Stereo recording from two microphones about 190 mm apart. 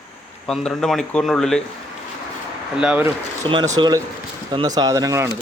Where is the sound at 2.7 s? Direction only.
5° right (ahead or behind).